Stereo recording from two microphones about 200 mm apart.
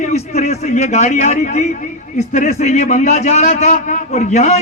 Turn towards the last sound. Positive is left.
turn(degrees=35)  # may be behind; listen again after turning